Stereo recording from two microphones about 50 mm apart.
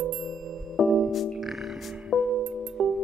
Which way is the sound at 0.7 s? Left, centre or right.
Centre.